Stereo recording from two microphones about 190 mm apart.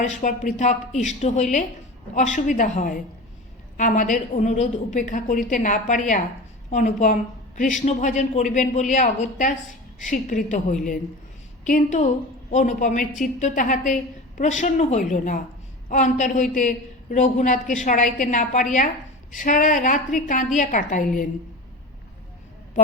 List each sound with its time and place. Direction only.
0.0 s a woman's voice: 40° left (ahead or behind)